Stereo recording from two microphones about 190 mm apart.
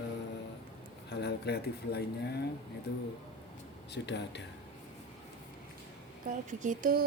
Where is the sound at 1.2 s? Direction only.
60° left (ahead or behind).